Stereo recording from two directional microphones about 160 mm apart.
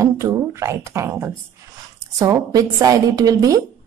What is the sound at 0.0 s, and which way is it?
A woman's voice, 20° right (ahead or behind).